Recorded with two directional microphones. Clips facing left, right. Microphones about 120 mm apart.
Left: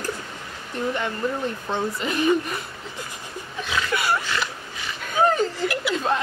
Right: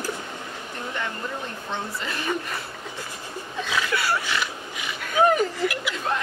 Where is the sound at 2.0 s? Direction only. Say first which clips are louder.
Left 7 dB; 20° left (ahead or behind).